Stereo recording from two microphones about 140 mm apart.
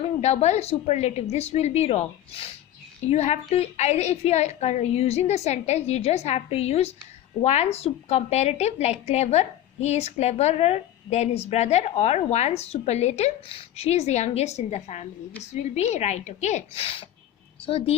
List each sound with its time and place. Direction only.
0.2 s a woman's voice: 50° left (ahead or behind)